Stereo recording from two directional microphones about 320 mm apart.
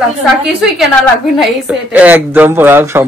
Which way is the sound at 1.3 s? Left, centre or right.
Centre.